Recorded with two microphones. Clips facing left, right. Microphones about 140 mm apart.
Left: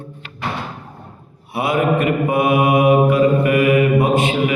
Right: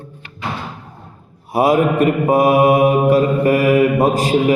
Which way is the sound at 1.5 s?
40° right (ahead or behind).